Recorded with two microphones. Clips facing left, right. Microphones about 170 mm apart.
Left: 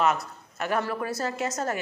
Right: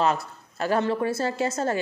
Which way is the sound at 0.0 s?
30° right (ahead or behind).